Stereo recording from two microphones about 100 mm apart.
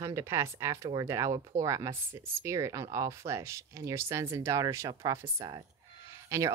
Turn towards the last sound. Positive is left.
turn(degrees=-25)  # may be behind; listen again after turning